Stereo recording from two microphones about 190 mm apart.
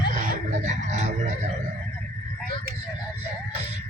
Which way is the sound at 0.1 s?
40° right (ahead or behind).